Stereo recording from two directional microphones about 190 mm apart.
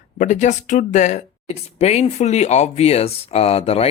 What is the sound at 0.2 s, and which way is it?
Speech, 40° left (ahead or behind).